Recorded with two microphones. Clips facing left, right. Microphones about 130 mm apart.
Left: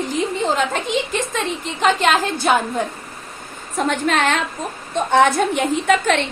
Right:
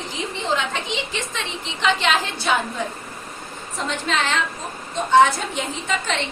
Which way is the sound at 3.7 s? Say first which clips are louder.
Left 6 dB; 55° left (ahead or behind).